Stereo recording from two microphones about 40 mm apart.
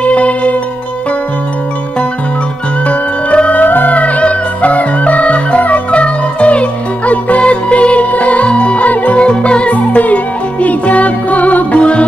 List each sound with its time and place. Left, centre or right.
0.0 s music: left
2.9 s music: left
3.6 s music: left
9.2 s music: left